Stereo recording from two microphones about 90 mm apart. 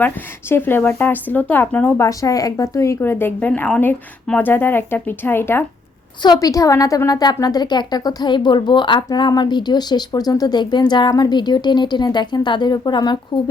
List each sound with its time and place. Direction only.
0.0 s a woman's voice: 25° left (ahead or behind)
2.0 s a woman's voice: 40° left (ahead or behind)
6.2 s a woman's voice: 45° left (ahead or behind)